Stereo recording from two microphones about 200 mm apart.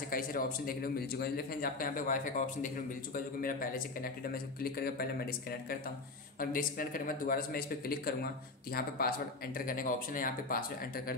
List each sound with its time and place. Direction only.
0.1 s a man's voice: 45° left (ahead or behind)